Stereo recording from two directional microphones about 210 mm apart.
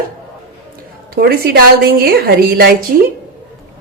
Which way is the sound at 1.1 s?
45° right (ahead or behind).